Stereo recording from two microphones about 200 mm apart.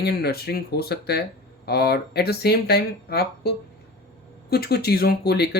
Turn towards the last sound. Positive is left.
turn(degrees=55)  # may be behind; listen again after turning